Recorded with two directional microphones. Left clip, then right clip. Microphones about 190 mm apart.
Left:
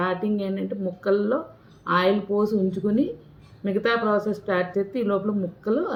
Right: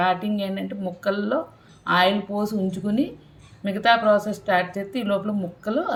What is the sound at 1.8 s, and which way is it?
Speech, 55° right (ahead or behind).